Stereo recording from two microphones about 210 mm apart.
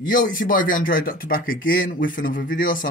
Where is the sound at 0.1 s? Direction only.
40° left (ahead or behind).